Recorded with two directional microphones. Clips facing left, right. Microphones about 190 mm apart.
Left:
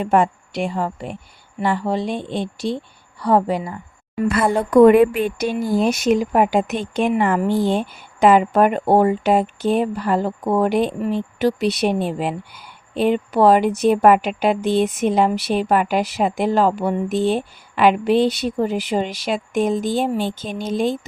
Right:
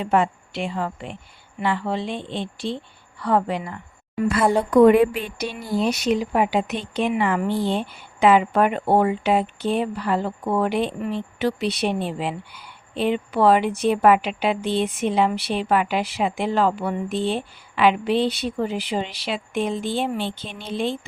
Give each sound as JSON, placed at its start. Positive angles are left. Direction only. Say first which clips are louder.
{"t": 0.0, "sound": "speech", "louder": "left 3 dB", "side_deg": 45}
{"t": 4.5, "sound": "speech", "louder": "left 3 dB", "side_deg": 50}